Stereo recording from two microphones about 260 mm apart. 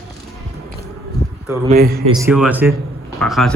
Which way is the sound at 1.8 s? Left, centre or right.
Right.